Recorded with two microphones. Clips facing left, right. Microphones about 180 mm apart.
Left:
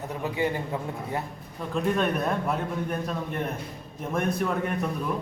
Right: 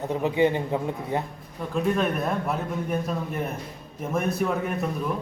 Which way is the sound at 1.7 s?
Centre (ahead or behind).